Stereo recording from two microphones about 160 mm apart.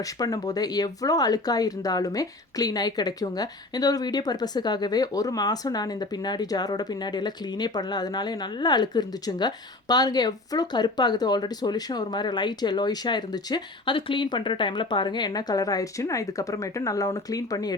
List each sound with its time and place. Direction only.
0.0 s speech: 20° left (ahead or behind)